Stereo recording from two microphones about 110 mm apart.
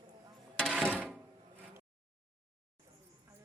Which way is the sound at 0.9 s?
15° right (ahead or behind).